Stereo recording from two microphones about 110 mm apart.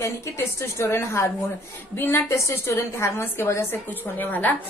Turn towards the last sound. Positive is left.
turn(degrees=15)  # may be behind; listen again after turning